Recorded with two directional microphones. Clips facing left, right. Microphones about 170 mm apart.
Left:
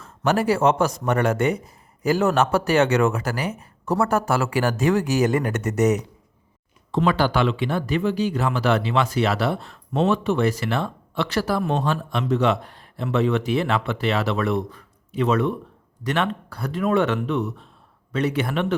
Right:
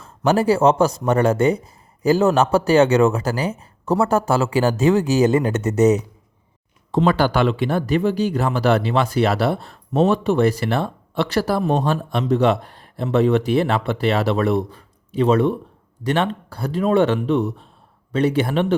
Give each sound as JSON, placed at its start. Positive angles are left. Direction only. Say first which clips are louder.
{"t": 0.3, "sound": "a man's voice", "louder": "right 4 dB", "side_deg": -30}
{"t": 6.9, "sound": "a man's voice", "louder": "right 3 dB", "side_deg": -40}